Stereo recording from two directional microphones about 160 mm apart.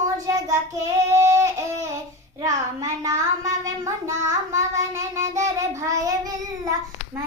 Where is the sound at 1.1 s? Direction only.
20° right (ahead or behind).